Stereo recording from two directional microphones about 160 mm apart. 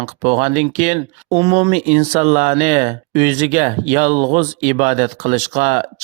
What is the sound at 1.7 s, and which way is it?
Speech, 45° right (ahead or behind).